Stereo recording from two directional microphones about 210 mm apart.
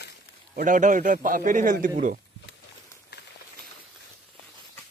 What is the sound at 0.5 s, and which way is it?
A man's voice, 40° right (ahead or behind).